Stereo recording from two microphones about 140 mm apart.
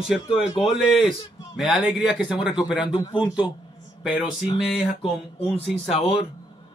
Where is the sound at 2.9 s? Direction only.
30° left (ahead or behind).